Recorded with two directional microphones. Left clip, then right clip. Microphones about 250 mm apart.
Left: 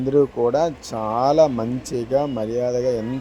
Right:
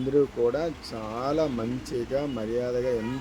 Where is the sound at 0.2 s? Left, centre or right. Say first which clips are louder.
Left 7 dB; left.